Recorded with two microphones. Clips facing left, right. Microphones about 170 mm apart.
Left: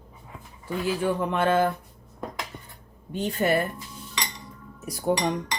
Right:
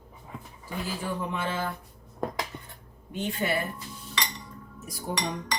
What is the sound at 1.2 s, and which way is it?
Speech, 65° left (ahead or behind).